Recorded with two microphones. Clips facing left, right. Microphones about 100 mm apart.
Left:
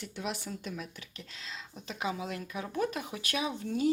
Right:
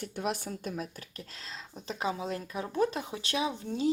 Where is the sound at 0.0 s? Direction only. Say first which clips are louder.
Right 4 dB; 50° right (ahead or behind).